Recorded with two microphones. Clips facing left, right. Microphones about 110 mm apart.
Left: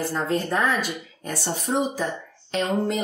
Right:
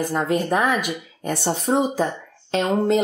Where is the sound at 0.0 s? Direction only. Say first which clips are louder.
Right 3 dB; 15° right (ahead or behind).